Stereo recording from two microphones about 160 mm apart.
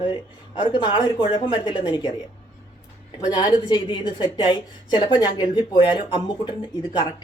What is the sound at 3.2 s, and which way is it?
A woman's voice, 25° left (ahead or behind).